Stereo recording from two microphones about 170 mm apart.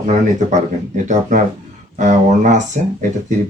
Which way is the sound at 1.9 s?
45° right (ahead or behind).